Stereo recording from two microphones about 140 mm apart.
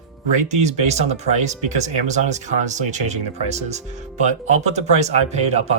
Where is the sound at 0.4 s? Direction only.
55° right (ahead or behind).